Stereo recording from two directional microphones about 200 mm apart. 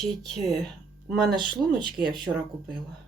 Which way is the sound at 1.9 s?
50° right (ahead or behind).